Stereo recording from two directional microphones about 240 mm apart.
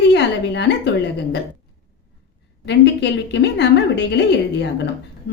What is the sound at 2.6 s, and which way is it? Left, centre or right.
A woman's voice, left.